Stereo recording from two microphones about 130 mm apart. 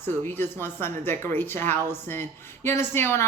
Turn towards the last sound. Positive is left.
turn(degrees=20)  # may be behind; listen again after turning